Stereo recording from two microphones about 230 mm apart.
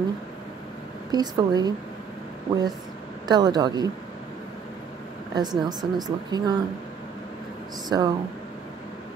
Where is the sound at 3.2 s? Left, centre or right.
Centre.